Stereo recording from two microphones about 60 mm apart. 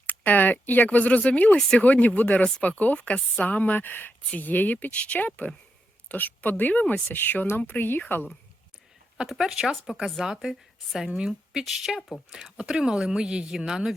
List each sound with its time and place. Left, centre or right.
0.1 s speech: left
1.5 s speech: centre
1.8 s a woman's voice: left
9.3 s a woman's voice: centre